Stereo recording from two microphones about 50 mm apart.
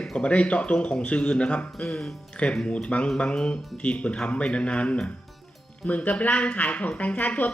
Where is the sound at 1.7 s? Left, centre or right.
Centre.